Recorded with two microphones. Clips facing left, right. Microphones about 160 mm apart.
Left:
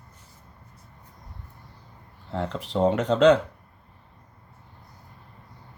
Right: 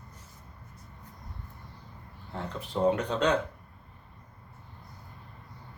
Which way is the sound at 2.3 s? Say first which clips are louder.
Left 8 dB; 90° left.